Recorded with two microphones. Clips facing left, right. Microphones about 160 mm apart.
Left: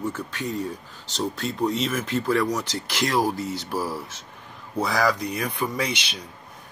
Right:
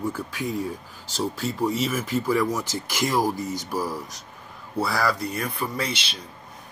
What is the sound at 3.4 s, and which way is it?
Speech, 45° right (ahead or behind).